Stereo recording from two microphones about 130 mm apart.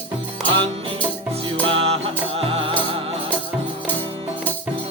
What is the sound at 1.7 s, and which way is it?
Music, 45° right (ahead or behind).